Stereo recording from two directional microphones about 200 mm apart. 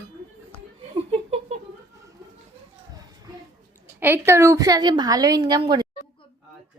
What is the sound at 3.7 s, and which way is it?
A woman's voice, 10° right (ahead or behind).